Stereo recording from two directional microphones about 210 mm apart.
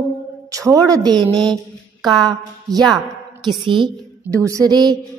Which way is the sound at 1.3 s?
5° left (ahead or behind).